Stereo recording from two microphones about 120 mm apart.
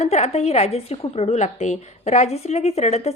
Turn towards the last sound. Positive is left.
turn(degrees=65)  # may be behind; listen again after turning